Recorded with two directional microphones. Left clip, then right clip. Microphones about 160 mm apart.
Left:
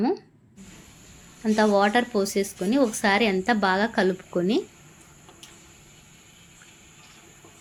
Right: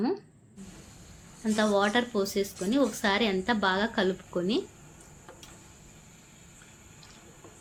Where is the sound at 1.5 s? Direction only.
40° left (ahead or behind).